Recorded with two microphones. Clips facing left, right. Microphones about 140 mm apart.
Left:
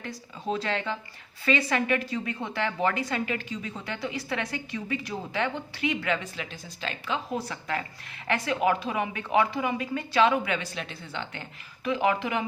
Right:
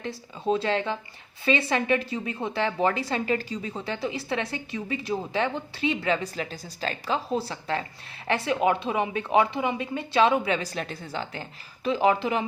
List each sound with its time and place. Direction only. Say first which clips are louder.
0.0 s speech: right 5 dB; 30° right (ahead or behind)